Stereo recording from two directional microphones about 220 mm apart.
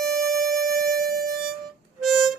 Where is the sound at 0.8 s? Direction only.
45° right (ahead or behind).